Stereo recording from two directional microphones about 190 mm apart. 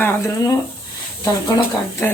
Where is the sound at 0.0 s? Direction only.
10° left (ahead or behind).